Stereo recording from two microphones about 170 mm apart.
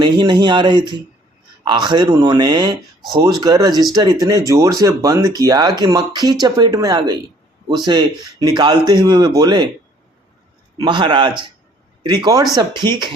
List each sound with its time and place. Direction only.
0.0 s speech: 25° right (ahead or behind)
10.8 s speech: 25° right (ahead or behind)